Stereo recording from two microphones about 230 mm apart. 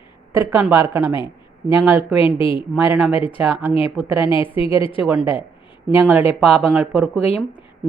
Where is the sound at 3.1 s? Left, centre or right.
Left.